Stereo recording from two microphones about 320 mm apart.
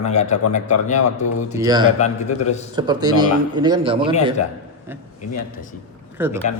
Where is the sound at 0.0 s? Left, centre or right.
Left.